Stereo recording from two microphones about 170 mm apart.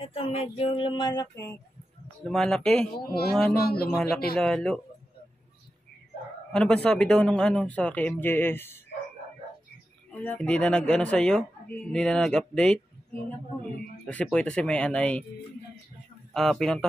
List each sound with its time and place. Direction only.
0.0 s a sound: 35° left (ahead or behind)
2.2 s speech: 5° left (ahead or behind)
3.0 s speech: 65° left (ahead or behind)
4.4 s speech: 5° left (ahead or behind)
6.5 s speech: 5° left (ahead or behind)
10.1 s speech: 10° left (ahead or behind)
14.0 s speech: 5° left (ahead or behind)
16.3 s speech: 5° left (ahead or behind)